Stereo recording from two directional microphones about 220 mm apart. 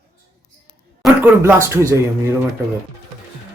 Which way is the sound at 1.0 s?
10° right (ahead or behind).